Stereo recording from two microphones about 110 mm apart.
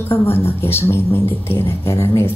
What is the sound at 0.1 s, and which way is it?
Speech, 20° left (ahead or behind).